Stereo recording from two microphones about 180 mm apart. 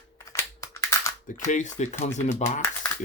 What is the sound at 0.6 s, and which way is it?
Typing, 15° left (ahead or behind).